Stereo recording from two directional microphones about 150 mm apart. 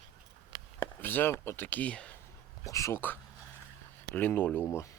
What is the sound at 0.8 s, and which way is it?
Speech, 15° left (ahead or behind).